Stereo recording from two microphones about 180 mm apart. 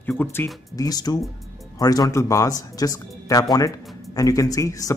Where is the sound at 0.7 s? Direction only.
20° left (ahead or behind).